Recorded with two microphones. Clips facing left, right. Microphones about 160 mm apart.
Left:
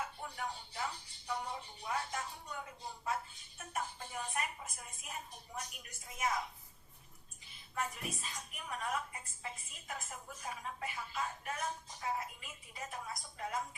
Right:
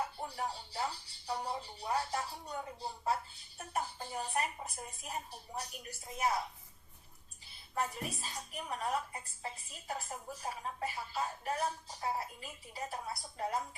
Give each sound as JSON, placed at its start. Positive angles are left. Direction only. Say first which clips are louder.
{"t": 0.0, "sound": "speech", "louder": "right 4 dB", "side_deg": -35}
{"t": 7.4, "sound": "speech", "louder": "right 3 dB", "side_deg": -35}